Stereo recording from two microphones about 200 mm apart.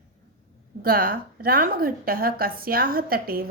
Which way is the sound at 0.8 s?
45° right (ahead or behind).